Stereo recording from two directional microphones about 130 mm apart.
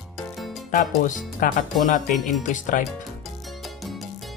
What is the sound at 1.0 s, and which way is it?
Speech, 85° left.